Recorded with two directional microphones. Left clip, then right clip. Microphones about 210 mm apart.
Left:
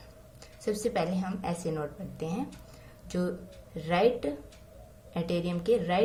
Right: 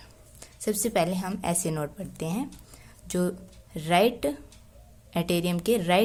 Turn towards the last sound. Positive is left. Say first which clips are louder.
# right 3 dB
turn(degrees=-45)  # may be behind; listen again after turning